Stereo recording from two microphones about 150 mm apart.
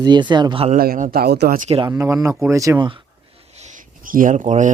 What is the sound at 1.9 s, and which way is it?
Speech, 20° right (ahead or behind).